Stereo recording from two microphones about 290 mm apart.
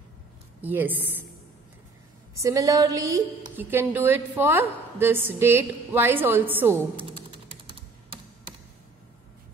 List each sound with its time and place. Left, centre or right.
0.6 s a woman's voice: centre
2.3 s a woman's voice: centre
7.0 s typing: centre